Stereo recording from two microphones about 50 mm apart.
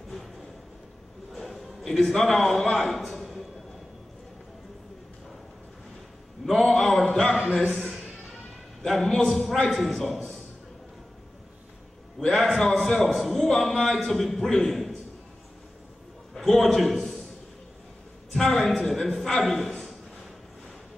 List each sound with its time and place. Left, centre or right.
1.3 s a sound: centre
6.4 s a man's voice: centre
12.4 s a man's voice: centre
16.3 s a man's voice: centre
18.3 s a man's voice: centre